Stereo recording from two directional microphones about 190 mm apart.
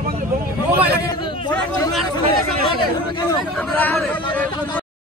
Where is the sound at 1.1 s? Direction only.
25° left (ahead or behind).